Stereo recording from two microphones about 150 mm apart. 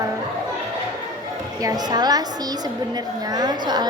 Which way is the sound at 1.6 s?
25° right (ahead or behind).